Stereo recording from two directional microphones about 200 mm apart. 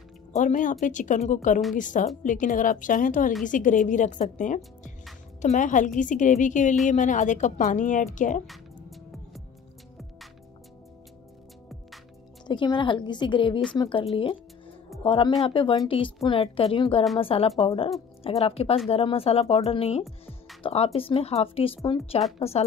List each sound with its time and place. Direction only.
0.3 s a woman's voice: 40° left (ahead or behind)
12.4 s speech: 20° left (ahead or behind)
15.0 s a woman's voice: 25° left (ahead or behind)